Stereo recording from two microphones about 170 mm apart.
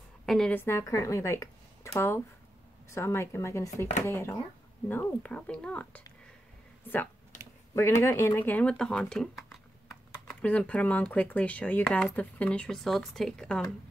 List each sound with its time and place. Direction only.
0.3 s speech: 5° left (ahead or behind)
7.3 s a sound: 45° left (ahead or behind)
7.7 s speech: 15° left (ahead or behind)